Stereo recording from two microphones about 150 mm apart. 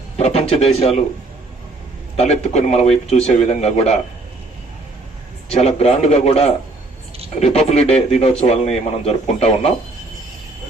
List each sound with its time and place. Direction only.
0.2 s speech: 45° left (ahead or behind)
2.1 s a man's voice: 45° left (ahead or behind)
5.5 s a man's voice: 45° left (ahead or behind)